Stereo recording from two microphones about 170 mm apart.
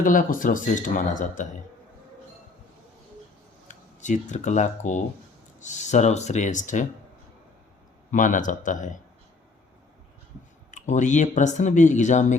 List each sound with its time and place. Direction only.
0.0 s speech: 50° left (ahead or behind)
3.7 s speech: 45° left (ahead or behind)
8.1 s speech: 50° left (ahead or behind)
10.7 s speech: 45° left (ahead or behind)